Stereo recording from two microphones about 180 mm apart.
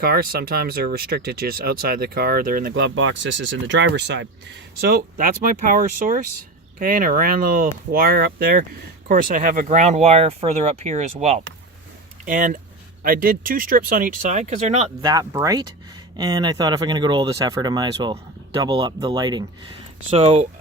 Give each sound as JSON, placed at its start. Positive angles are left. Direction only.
{"t": 0.0, "sound": "speech", "side_deg": -55}
{"t": 4.8, "sound": "speech", "side_deg": -55}
{"t": 12.2, "sound": "speech", "side_deg": -50}
{"t": 15.0, "sound": "speech", "side_deg": -20}